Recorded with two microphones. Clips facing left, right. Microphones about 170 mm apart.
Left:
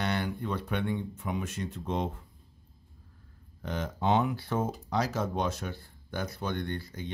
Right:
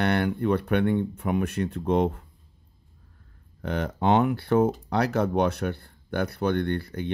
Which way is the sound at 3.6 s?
65° right (ahead or behind).